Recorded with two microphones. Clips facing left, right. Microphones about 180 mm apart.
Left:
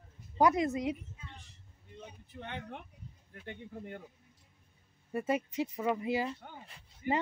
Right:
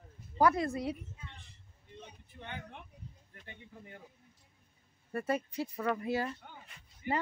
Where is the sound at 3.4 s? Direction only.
60° left (ahead or behind).